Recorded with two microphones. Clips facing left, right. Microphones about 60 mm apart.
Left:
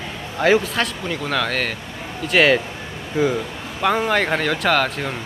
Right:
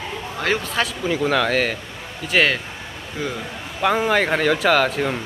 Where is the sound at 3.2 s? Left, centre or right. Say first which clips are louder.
Left 8 dB; centre.